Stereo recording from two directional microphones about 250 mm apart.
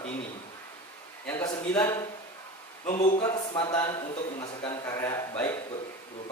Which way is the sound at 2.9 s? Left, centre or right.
Left.